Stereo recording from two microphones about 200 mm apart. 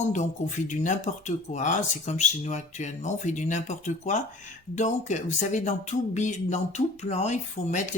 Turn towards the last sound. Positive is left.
turn(degrees=35)  # may be behind; listen again after turning